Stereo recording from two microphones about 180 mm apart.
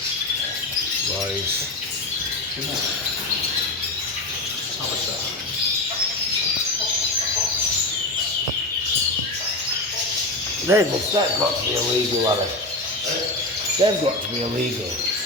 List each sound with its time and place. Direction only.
10.7 s speech: 15° right (ahead or behind)
13.8 s speech: 25° right (ahead or behind)